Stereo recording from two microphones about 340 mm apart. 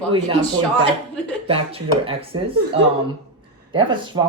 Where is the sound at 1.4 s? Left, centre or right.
Centre.